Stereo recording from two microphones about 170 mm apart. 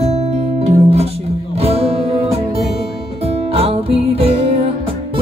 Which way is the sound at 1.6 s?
35° right (ahead or behind).